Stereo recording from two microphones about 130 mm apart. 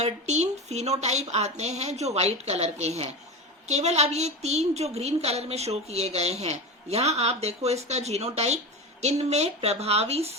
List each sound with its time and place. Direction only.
0.0 s a woman's voice: 60° right (ahead or behind)